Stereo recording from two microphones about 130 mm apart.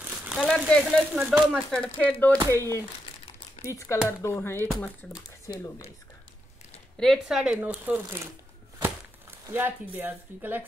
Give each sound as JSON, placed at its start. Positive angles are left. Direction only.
{"t": 0.2, "sound": "a sound", "side_deg": -5}
{"t": 0.7, "sound": "speech", "side_deg": 5}
{"t": 5.5, "sound": "speech", "side_deg": 25}
{"t": 7.0, "sound": "speech", "side_deg": 0}
{"t": 9.5, "sound": "speech", "side_deg": -15}